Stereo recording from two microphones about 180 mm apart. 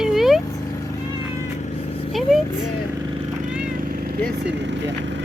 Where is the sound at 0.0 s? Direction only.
Centre (ahead or behind).